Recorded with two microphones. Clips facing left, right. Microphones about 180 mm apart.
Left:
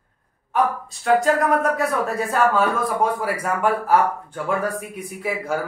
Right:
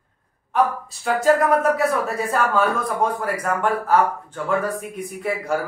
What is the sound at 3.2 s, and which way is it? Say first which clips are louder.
Speech: left 1 dB; 10° left (ahead or behind).